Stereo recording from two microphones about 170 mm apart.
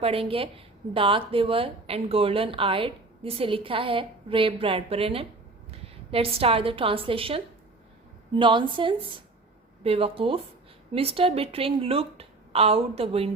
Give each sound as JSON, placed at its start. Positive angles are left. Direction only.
{"t": 0.0, "sound": "a woman's voice", "side_deg": -35}